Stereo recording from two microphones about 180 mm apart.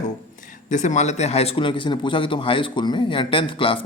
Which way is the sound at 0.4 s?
45° left (ahead or behind).